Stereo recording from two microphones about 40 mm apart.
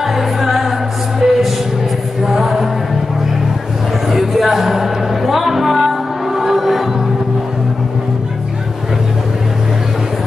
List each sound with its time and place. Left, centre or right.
0.0 s music: centre
1.2 s music: centre
2.2 s music: centre
4.1 s music: centre